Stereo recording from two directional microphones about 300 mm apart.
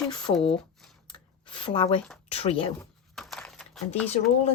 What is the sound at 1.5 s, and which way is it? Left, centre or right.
Speech, centre.